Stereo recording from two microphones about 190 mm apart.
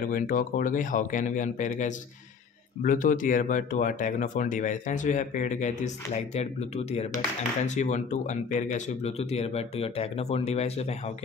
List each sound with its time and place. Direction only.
0.0 s speech: 50° left (ahead or behind)